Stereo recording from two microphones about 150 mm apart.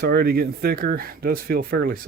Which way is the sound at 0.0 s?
90° right.